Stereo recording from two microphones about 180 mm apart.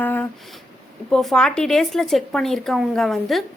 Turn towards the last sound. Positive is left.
turn(degrees=0)  # may be behind; listen again after turning